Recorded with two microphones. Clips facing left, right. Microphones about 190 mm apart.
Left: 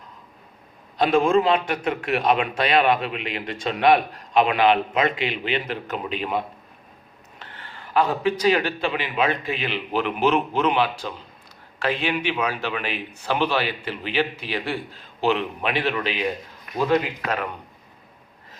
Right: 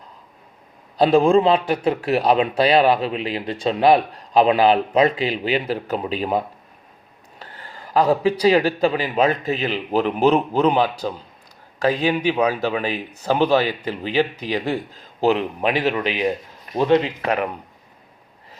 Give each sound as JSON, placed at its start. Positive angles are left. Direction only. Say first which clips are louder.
{"t": 0.9, "sound": "a man's voice", "louder": "right 4 dB", "side_deg": -35}
{"t": 16.6, "sound": "speech", "louder": "right 4 dB", "side_deg": -30}